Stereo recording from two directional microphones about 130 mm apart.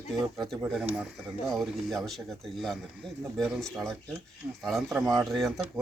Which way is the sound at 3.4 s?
5° left (ahead or behind).